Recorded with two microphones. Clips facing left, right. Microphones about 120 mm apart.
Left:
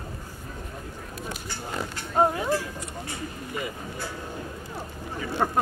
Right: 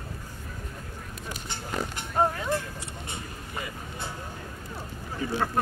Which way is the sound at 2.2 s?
15° left (ahead or behind).